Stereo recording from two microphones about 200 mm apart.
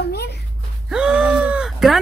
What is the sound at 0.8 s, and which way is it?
A woman's voice, 5° right (ahead or behind).